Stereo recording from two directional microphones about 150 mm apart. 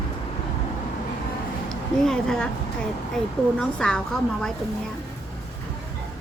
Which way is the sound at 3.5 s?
5° left (ahead or behind).